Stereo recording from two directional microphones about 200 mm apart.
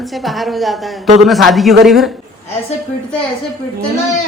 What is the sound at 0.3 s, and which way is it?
A man's voice, centre (ahead or behind).